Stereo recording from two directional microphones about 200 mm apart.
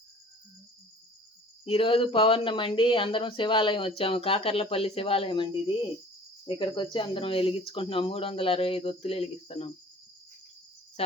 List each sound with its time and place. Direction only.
1.6 s speech: 25° left (ahead or behind)